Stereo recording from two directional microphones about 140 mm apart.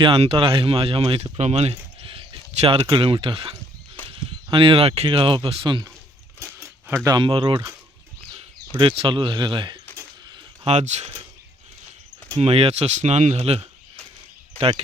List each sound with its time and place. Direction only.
0.0 s speech: 45° right (ahead or behind)
6.4 s a sound: 15° right (ahead or behind)
7.2 s speech: 40° right (ahead or behind)
8.8 s speech: 40° right (ahead or behind)
10.7 s speech: 55° right (ahead or behind)
12.4 s speech: 45° right (ahead or behind)